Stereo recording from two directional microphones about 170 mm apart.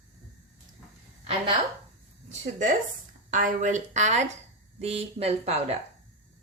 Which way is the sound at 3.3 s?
50° right (ahead or behind).